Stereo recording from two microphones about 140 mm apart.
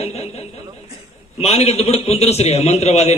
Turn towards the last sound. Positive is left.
turn(degrees=50)  # may be behind; listen again after turning